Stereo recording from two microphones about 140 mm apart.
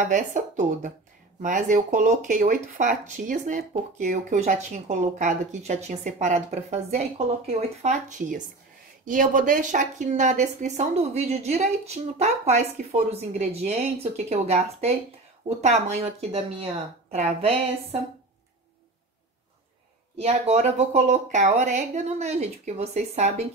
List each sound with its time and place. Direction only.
0.1 s a woman's voice: 65° right (ahead or behind); by 17.6 s 45° right (ahead or behind)
20.2 s a woman's voice: 50° right (ahead or behind)